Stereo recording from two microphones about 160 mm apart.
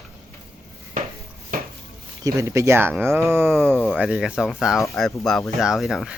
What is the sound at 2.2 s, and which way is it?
Speech, 20° right (ahead or behind).